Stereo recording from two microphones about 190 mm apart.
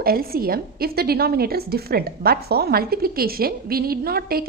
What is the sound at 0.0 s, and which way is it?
A woman's voice, 50° right (ahead or behind).